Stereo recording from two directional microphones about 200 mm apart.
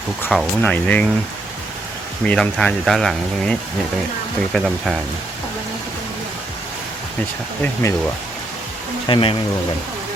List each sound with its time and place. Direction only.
0.2 s speech: 5° left (ahead or behind)
2.2 s speech: 5° left (ahead or behind)
4.5 s speech: centre (ahead or behind)
7.6 s speech: 10° left (ahead or behind)
9.0 s speech: 25° left (ahead or behind)